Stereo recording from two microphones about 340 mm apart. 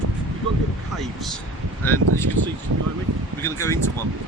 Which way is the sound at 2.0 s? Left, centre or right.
Right.